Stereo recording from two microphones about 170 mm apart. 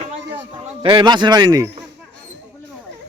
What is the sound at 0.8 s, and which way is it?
Speech, 25° right (ahead or behind).